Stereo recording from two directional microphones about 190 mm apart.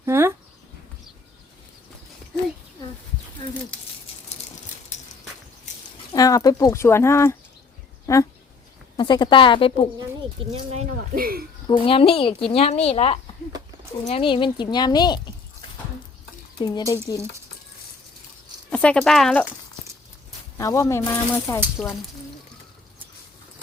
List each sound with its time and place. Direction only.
0.0 s a sound: 15° right (ahead or behind)
6.1 s speech: 20° left (ahead or behind)
10.5 s speech: 35° right (ahead or behind)
11.1 s speech: 50° right (ahead or behind)
11.7 s speech: 30° left (ahead or behind)
16.6 s speech: 20° left (ahead or behind)
18.7 s speech: 5° left (ahead or behind)
20.6 s speech: 15° left (ahead or behind)